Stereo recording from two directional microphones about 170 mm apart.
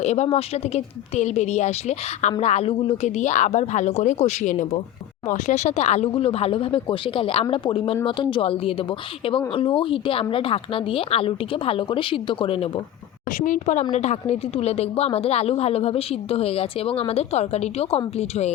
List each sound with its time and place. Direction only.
0.0 s a woman's voice: 40° left (ahead or behind)
13.3 s a woman's voice: 50° left (ahead or behind)